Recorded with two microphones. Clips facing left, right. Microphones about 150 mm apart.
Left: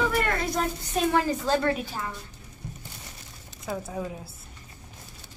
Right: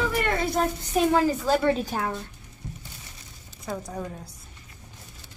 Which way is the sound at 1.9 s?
65° right (ahead or behind).